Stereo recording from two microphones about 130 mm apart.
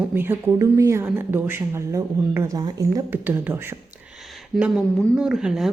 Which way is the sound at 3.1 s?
15° right (ahead or behind).